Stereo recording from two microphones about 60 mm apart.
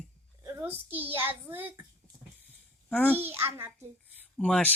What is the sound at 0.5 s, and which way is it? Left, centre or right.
A child's voice, right.